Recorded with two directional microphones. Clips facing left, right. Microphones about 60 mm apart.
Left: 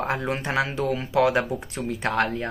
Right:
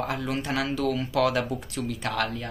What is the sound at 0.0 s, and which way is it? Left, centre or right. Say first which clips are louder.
Speech: left 3 dB; left.